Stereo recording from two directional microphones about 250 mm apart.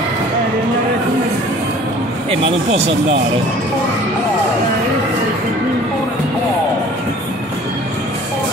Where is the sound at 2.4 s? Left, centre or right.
Right.